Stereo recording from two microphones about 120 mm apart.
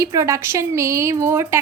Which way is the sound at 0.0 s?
25° right (ahead or behind).